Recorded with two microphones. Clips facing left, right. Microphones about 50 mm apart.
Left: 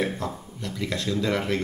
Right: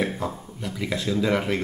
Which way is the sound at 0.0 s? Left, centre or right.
Centre.